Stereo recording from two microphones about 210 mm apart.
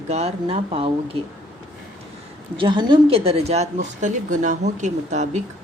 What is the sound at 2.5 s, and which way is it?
Speech, 20° right (ahead or behind).